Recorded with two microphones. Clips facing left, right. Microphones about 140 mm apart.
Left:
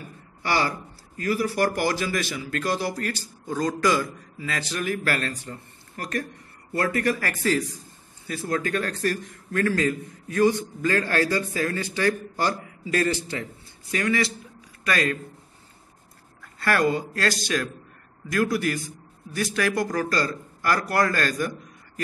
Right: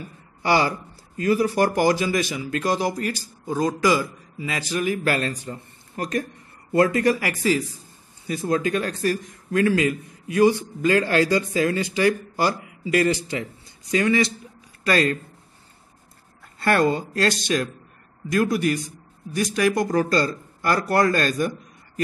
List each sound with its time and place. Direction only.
0.4 s a man's voice: 15° right (ahead or behind)
16.5 s speech: 25° right (ahead or behind)